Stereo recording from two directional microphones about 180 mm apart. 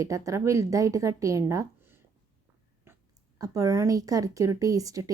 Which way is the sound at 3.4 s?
20° right (ahead or behind).